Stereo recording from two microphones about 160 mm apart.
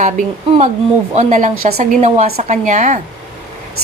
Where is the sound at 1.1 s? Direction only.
50° right (ahead or behind).